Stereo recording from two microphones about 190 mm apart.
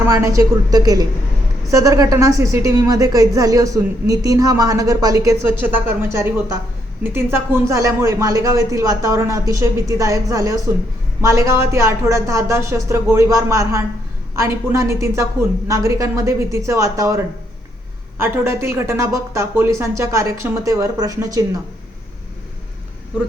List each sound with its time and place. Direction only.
0.0 s a woman's voice: 15° right (ahead or behind)